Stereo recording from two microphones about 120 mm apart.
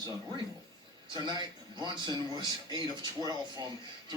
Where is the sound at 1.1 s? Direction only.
35° right (ahead or behind).